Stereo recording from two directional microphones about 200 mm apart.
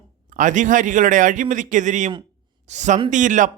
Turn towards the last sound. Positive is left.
turn(degrees=-40)  # may be behind; listen again after turning